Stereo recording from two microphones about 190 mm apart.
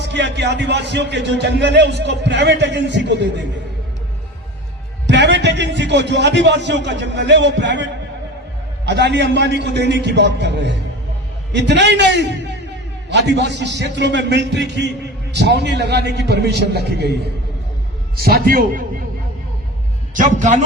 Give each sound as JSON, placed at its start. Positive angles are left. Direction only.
{"t": 0.0, "sound": "speech", "side_deg": -65}
{"t": 5.0, "sound": "a man's voice", "side_deg": -65}
{"t": 8.9, "sound": "speech", "side_deg": -65}
{"t": 18.2, "sound": "a man's voice", "side_deg": -50}